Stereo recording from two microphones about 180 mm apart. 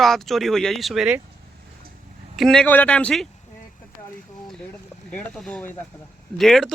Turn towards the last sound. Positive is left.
turn(degrees=0)  # may be behind; listen again after turning